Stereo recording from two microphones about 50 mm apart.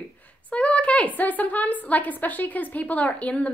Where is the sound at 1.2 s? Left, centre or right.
Left.